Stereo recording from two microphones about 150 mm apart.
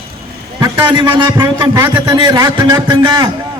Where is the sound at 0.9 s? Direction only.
30° right (ahead or behind).